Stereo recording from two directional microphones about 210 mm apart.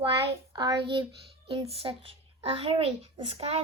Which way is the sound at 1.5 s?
25° right (ahead or behind).